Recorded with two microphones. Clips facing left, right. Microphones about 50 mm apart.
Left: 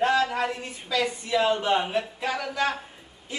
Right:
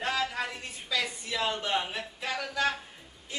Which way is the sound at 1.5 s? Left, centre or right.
Left.